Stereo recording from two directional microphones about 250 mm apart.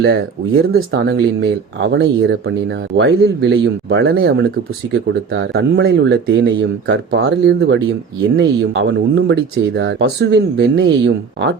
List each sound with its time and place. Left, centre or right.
0.7 s speech: right